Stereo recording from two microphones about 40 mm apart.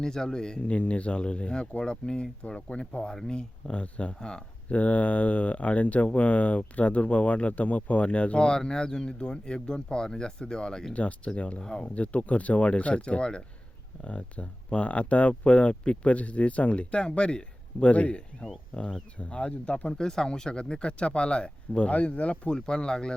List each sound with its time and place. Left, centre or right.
0.0 s speech: centre
0.7 s speech: left
4.7 s speech: left
8.4 s speech: centre
11.3 s speech: left
11.6 s speech: centre
11.9 s speech: left
21.9 s speech: left
22.5 s speech: centre